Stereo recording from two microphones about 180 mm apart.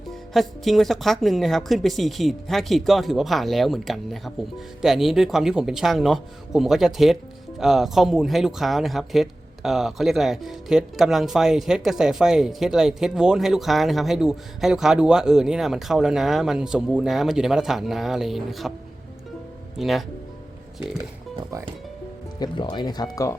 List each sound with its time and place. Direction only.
0.3 s speech: centre (ahead or behind)
19.8 s speech: centre (ahead or behind)
22.4 s speech: 25° left (ahead or behind)